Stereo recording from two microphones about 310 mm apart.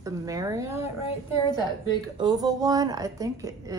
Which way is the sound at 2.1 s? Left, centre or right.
Centre.